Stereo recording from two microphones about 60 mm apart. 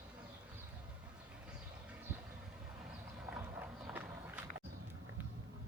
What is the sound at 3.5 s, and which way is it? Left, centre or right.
Walk, right.